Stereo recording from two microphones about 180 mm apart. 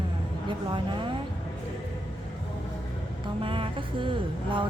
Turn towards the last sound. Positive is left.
turn(degrees=-30)  # may be behind; listen again after turning